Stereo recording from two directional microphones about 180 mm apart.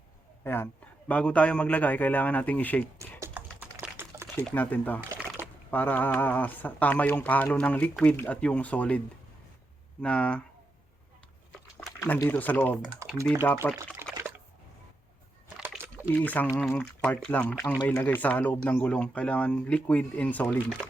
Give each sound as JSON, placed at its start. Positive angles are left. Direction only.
{"t": 0.4, "sound": "speech", "side_deg": 10}
{"t": 3.2, "sound": "typing", "side_deg": -10}
{"t": 4.4, "sound": "speech", "side_deg": 10}
{"t": 10.0, "sound": "speech", "side_deg": 5}
{"t": 11.9, "sound": "speech", "side_deg": 15}
{"t": 13.7, "sound": "pour", "side_deg": -15}
{"t": 16.0, "sound": "speech", "side_deg": 10}